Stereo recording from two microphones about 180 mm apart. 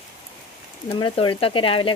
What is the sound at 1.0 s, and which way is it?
Speech, 30° left (ahead or behind).